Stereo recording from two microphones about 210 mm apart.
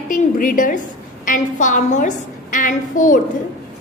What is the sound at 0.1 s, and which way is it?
A woman's voice, 40° left (ahead or behind).